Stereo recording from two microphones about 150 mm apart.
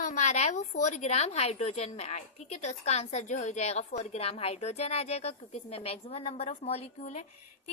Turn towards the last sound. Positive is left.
turn(degrees=50)  # may be behind; listen again after turning